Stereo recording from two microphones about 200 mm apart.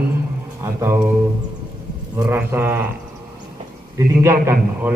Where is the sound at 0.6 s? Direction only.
10° right (ahead or behind).